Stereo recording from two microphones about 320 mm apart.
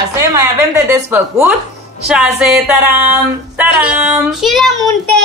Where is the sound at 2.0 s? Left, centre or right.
Centre.